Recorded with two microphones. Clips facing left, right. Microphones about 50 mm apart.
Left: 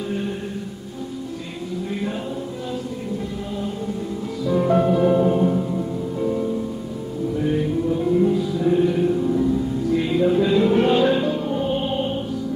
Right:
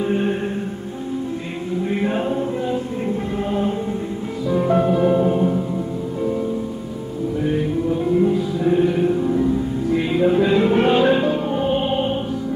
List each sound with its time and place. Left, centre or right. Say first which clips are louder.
0.0 s music: right 6 dB; right
1.7 s music: right 6 dB; right
8.2 s music: right 1 dB; right